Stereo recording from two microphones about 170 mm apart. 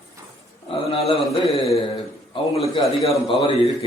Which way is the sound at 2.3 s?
35° left (ahead or behind).